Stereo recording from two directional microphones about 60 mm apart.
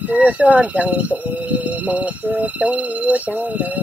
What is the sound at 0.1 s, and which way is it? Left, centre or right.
Speech, right.